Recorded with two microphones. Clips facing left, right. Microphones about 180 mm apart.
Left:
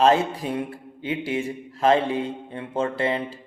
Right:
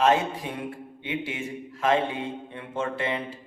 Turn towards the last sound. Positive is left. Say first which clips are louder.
# left 5 dB
turn(degrees=30)  # may be behind; listen again after turning